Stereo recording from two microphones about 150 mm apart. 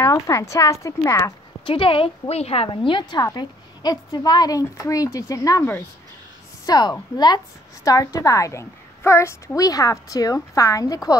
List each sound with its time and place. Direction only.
0.0 s a woman's voice: 20° left (ahead or behind)
1.7 s a woman's voice: 35° left (ahead or behind)